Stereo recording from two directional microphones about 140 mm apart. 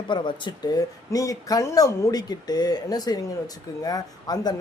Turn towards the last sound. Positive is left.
turn(degrees=30)  # may be behind; listen again after turning